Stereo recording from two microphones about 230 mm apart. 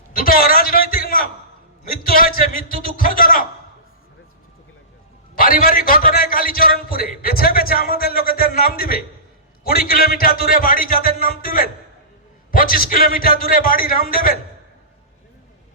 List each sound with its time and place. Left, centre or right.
0.2 s a sound: left
2.0 s a man's voice: left
5.4 s a man's voice: left